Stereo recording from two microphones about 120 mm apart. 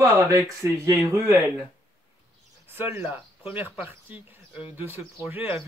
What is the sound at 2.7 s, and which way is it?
Speech, 15° right (ahead or behind).